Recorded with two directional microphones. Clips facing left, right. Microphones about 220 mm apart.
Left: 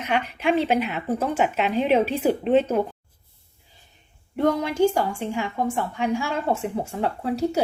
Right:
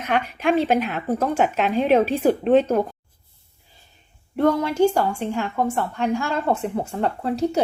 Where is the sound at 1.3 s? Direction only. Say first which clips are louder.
Right 2 dB; 45° right (ahead or behind).